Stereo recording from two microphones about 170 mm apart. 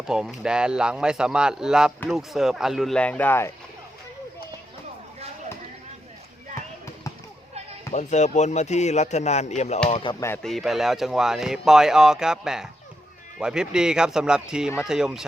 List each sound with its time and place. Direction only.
0.0 s speech: 5° right (ahead or behind); by 3.5 s 15° left (ahead or behind)
7.9 s speech: 45° left (ahead or behind)
9.9 s speech: 30° left (ahead or behind)
10.2 s speech: 15° left (ahead or behind)
10.4 s speech: centre (ahead or behind)